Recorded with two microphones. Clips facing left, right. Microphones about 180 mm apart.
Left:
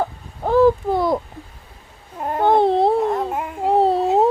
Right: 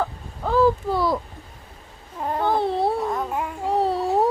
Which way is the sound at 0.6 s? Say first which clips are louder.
Left 4 dB; 20° left (ahead or behind).